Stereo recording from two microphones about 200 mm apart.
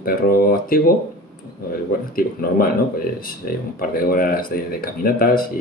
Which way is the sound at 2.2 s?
45° left (ahead or behind).